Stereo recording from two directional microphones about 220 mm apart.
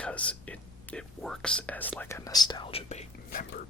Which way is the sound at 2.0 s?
10° left (ahead or behind).